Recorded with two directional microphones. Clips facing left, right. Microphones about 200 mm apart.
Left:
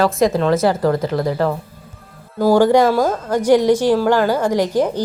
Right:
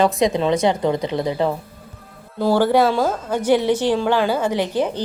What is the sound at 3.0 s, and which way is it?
Speech, 5° right (ahead or behind).